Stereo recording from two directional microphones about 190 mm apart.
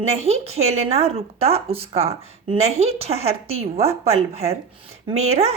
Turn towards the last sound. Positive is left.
turn(degrees=-35)  # may be behind; listen again after turning